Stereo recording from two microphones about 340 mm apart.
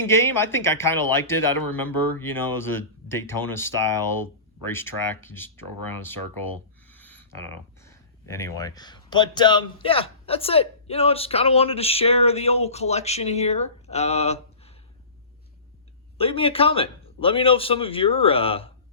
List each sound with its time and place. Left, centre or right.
0.1 s speech: centre
6.9 s a sound: centre
7.9 s speech: centre
16.1 s speech: centre